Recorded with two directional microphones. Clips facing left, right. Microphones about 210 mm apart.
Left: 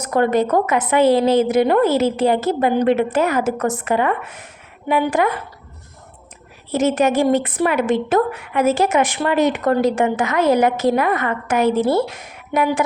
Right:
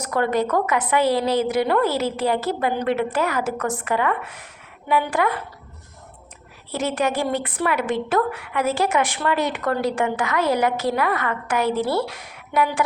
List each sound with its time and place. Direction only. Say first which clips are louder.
0.0 s a woman's voice: left 5 dB; 20° left (ahead or behind)
6.7 s a woman's voice: left 6 dB; 20° left (ahead or behind)